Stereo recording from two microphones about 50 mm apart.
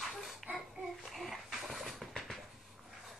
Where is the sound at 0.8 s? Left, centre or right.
Centre.